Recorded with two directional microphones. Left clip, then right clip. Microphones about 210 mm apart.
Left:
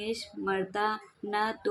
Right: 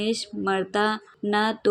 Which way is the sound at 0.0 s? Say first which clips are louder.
Right 7 dB; 35° right (ahead or behind).